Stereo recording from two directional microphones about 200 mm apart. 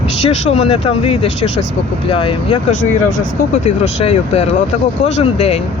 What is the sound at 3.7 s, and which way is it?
Speech, 30° left (ahead or behind).